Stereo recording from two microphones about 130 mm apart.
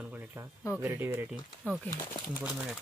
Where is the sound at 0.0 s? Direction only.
10° right (ahead or behind).